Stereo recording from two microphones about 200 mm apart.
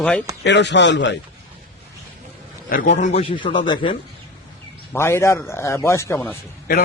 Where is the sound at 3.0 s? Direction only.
35° left (ahead or behind).